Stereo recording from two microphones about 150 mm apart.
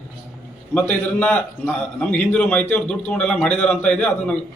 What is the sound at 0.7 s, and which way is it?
A man's voice, 10° left (ahead or behind).